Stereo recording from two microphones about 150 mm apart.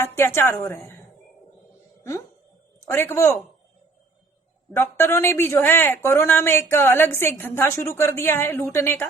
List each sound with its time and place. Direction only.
0.0 s a woman's voice: 15° left (ahead or behind)
2.8 s speech: 15° left (ahead or behind)
4.7 s speech: 15° left (ahead or behind)